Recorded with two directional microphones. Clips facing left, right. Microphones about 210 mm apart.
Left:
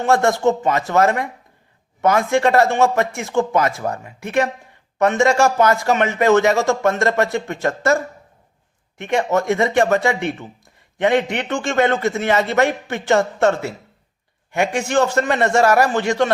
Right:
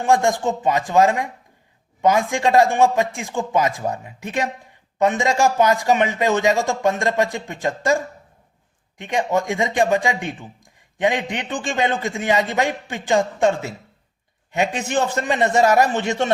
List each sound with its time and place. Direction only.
0.0 s a man's voice: 15° right (ahead or behind)